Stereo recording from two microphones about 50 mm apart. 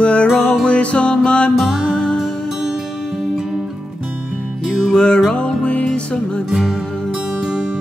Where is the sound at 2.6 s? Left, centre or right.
Centre.